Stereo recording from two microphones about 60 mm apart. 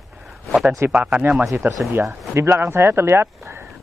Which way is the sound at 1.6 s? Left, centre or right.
Right.